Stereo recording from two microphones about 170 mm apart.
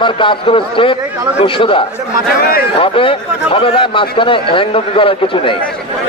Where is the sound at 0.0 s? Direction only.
30° left (ahead or behind).